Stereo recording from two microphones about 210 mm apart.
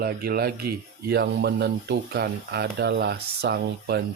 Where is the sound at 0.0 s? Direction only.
50° right (ahead or behind).